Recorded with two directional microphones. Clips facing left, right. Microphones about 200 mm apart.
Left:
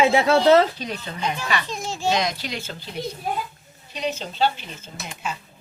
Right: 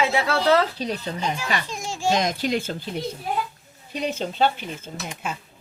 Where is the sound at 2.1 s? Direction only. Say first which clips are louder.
Right 3 dB; 50° right (ahead or behind).